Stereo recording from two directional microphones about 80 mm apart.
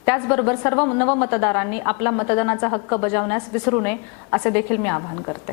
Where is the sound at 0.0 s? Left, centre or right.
Left.